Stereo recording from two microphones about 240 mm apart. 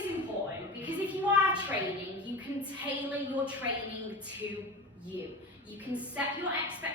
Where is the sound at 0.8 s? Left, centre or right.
Centre.